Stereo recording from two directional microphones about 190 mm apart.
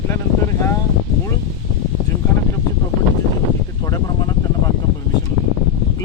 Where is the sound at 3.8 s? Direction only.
20° left (ahead or behind).